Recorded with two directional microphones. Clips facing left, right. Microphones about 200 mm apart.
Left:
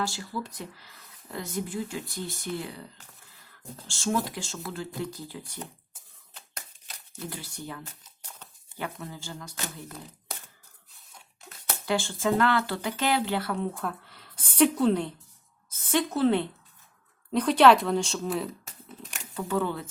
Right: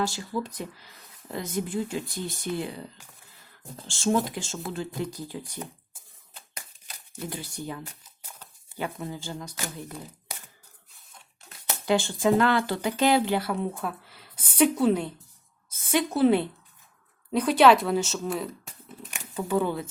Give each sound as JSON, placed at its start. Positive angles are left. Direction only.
{"t": 0.0, "sound": "speech", "side_deg": -20}
{"t": 3.8, "sound": "speech", "side_deg": -20}
{"t": 7.2, "sound": "speech", "side_deg": -20}
{"t": 8.3, "sound": "a sound", "side_deg": -10}
{"t": 11.9, "sound": "a woman's voice", "side_deg": -20}
{"t": 19.4, "sound": "speech", "side_deg": -15}